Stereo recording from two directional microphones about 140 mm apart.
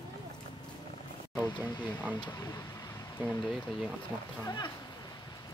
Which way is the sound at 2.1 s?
25° left (ahead or behind).